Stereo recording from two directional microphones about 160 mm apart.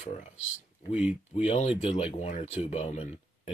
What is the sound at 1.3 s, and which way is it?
Speech, 45° left (ahead or behind).